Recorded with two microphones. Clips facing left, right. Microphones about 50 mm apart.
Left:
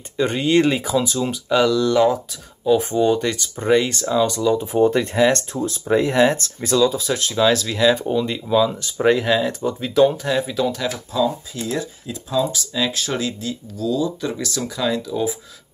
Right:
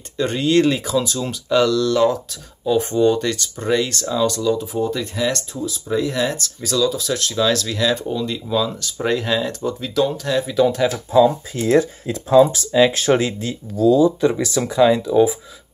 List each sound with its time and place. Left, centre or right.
0.2 s speech: centre
4.7 s speech: left
5.5 s speech: left; by 10.4 s centre
10.4 s speech: centre
11.1 s speech: right
11.6 s speech: right
12.7 s speech: right